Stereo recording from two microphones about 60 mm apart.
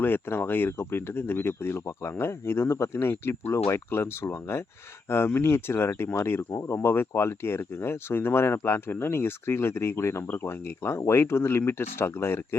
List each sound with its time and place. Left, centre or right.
0.0 s speech: left